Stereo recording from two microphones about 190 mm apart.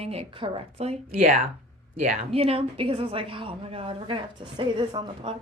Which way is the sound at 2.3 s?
30° right (ahead or behind).